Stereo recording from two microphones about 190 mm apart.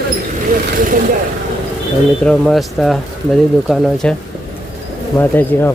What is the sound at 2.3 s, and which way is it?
Speech, 5° left (ahead or behind).